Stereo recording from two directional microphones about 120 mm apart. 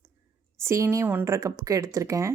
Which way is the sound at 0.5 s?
20° right (ahead or behind).